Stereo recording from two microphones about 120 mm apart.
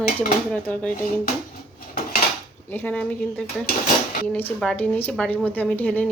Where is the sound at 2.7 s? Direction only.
15° left (ahead or behind).